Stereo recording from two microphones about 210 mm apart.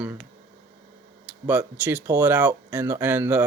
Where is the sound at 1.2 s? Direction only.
10° right (ahead or behind).